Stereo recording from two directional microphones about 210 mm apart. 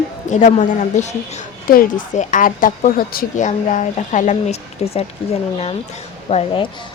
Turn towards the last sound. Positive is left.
turn(degrees=25)  # may be behind; listen again after turning